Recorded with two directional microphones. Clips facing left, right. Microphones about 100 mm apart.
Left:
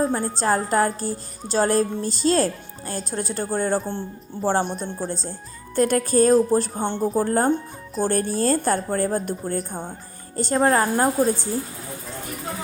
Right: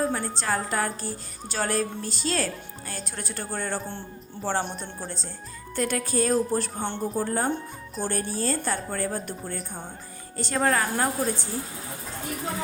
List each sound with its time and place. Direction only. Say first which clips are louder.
0.0 s a woman's voice: left 5 dB; 25° left (ahead or behind)
4.6 s speech: left 7 dB; centre (ahead or behind)
5.0 s speech: left 7 dB; 40° left (ahead or behind)
7.1 s a woman's voice: left 7 dB; 40° left (ahead or behind)
10.3 s speech: left 5 dB; 35° left (ahead or behind)